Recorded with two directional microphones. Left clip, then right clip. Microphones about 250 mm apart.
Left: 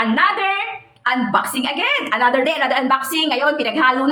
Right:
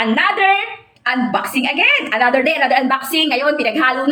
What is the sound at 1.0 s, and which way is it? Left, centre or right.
A woman's voice, centre.